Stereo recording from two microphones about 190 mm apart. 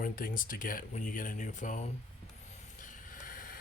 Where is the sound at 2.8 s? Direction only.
45° left (ahead or behind).